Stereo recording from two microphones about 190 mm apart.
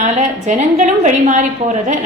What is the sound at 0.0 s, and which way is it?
A woman's voice, 35° right (ahead or behind).